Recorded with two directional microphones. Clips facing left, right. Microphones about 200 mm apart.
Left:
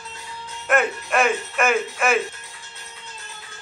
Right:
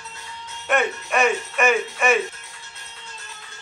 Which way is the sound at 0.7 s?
Centre (ahead or behind).